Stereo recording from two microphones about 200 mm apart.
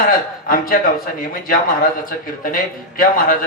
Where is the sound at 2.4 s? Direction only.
45° left (ahead or behind).